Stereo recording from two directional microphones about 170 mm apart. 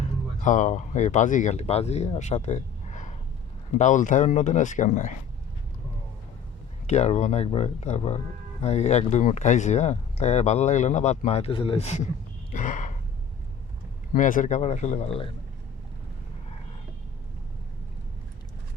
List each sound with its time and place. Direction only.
0.4 s speech: 45° left (ahead or behind)
6.8 s speech: 40° left (ahead or behind)
12.5 s a sound: 45° left (ahead or behind)
14.1 s speech: 50° left (ahead or behind); by 15.3 s 35° left (ahead or behind)